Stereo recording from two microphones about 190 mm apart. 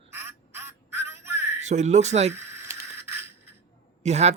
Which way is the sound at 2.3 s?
15° right (ahead or behind).